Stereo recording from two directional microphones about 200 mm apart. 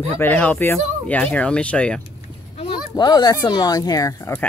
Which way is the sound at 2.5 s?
20° left (ahead or behind).